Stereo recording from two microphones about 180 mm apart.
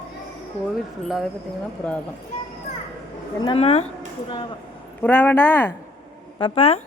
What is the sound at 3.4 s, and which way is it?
Speech, 30° left (ahead or behind).